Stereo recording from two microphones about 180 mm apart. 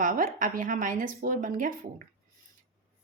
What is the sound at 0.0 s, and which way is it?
A woman's voice, 50° right (ahead or behind).